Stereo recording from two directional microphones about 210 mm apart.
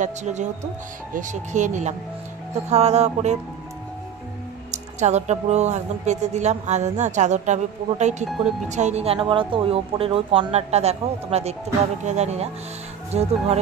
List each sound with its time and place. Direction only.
0.0 s speech: 35° right (ahead or behind)
4.6 s speech: 35° right (ahead or behind)